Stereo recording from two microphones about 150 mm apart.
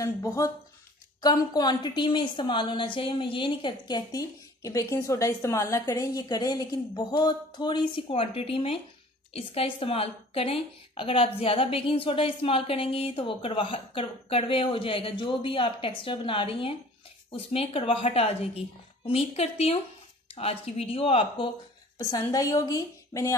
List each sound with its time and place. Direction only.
0.0 s a woman's voice: 20° left (ahead or behind); by 21.5 s 40° left (ahead or behind)
21.9 s a woman's voice: 25° left (ahead or behind)